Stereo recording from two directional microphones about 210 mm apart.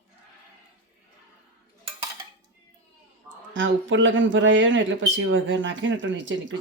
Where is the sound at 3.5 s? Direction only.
65° right (ahead or behind).